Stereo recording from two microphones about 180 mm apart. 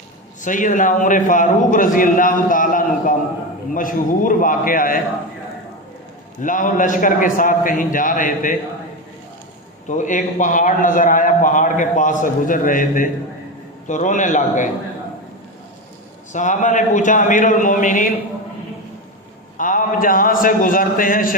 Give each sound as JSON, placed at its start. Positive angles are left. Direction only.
{"t": 0.4, "sound": "a man's voice", "side_deg": 45}
{"t": 6.4, "sound": "a man's voice", "side_deg": 45}
{"t": 9.9, "sound": "a man's voice", "side_deg": 45}
{"t": 16.3, "sound": "a man's voice", "side_deg": 45}
{"t": 19.5, "sound": "a man's voice", "side_deg": 50}